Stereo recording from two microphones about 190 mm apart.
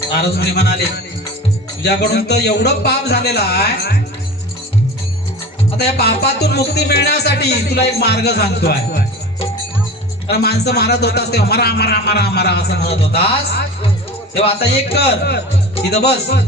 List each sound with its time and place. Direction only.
0.2 s speech: 60° left (ahead or behind)
5.7 s speech: 60° left (ahead or behind)
10.2 s speech: 60° left (ahead or behind)